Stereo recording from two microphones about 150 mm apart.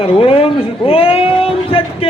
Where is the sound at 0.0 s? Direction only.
40° left (ahead or behind).